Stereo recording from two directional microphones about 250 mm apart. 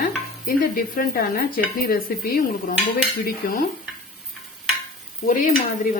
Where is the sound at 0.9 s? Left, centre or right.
Left.